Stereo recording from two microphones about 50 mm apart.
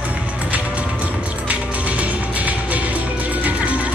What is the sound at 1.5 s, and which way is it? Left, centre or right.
Music, right.